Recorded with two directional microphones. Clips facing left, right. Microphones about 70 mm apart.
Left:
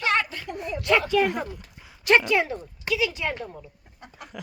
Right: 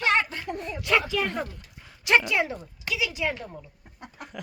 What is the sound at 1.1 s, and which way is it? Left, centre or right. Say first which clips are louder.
A man's voice: left 5 dB; centre.